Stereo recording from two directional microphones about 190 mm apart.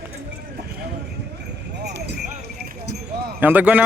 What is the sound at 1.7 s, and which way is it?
Clip-clop, 60° right (ahead or behind).